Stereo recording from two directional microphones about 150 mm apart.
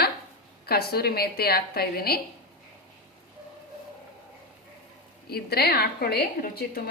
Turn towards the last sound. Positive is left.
turn(degrees=90)